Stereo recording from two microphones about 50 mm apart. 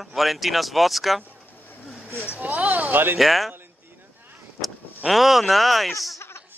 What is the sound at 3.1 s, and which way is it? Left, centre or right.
Speech, centre.